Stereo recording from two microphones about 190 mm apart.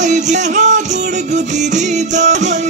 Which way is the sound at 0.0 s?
40° right (ahead or behind).